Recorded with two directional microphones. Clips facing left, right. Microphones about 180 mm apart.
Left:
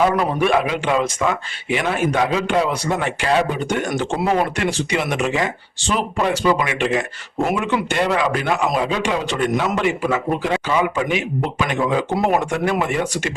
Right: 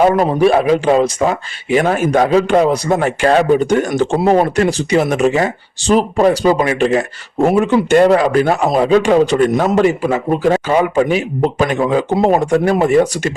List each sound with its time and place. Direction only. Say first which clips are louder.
0.0 s speech: right 6 dB; 35° right (ahead or behind)